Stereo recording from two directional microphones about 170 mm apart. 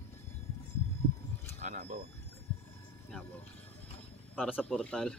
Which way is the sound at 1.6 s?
50° right (ahead or behind).